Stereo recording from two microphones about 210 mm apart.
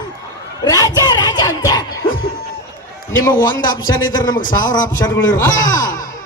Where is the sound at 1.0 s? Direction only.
20° left (ahead or behind).